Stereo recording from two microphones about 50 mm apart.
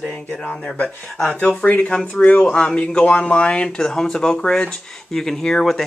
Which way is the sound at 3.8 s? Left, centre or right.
Centre.